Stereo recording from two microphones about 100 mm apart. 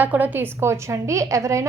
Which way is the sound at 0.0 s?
15° right (ahead or behind).